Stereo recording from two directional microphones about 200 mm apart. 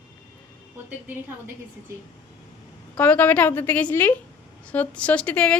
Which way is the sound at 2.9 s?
10° left (ahead or behind).